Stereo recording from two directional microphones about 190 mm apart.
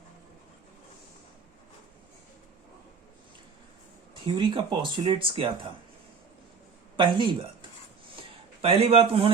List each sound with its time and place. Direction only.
4.4 s speech: 25° right (ahead or behind)
6.9 s speech: 25° right (ahead or behind)
8.1 s a sound: 30° right (ahead or behind)